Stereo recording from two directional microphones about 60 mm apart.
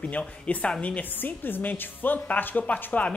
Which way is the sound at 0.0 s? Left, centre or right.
Left.